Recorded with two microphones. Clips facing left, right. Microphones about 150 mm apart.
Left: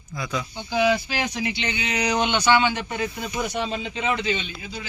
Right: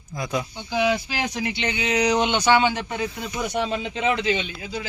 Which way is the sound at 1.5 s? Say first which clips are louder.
Right 2 dB; 45° right (ahead or behind).